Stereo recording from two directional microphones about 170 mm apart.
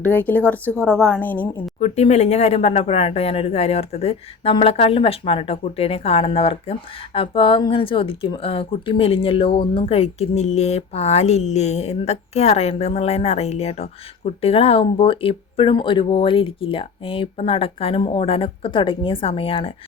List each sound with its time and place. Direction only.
0.0 s speech: 10° left (ahead or behind)
1.8 s speech: 40° left (ahead or behind)